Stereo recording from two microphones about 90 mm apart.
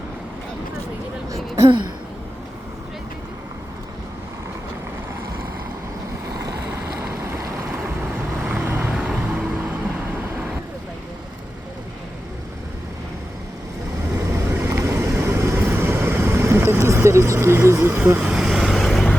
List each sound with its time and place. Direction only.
1.3 s a sound: 35° right (ahead or behind)
7.0 s vehicle: 30° right (ahead or behind)
8.9 s vehicle: 10° right (ahead or behind)
14.2 s vehicle: 25° right (ahead or behind)
18.3 s vehicle: 5° right (ahead or behind)